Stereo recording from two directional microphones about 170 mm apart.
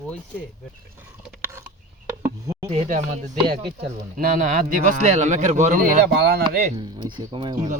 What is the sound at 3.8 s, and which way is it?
A man's voice, 55° right (ahead or behind).